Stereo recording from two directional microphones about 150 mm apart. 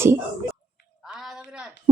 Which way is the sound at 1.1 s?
Centre (ahead or behind).